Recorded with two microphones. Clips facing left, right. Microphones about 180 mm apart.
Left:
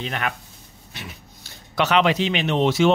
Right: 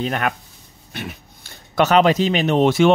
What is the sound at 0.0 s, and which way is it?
Speech, 45° right (ahead or behind).